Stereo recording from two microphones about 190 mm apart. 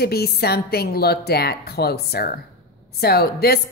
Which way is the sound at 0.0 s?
55° left (ahead or behind).